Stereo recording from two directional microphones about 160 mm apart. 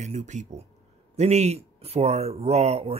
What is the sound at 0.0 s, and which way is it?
Speech, 45° right (ahead or behind).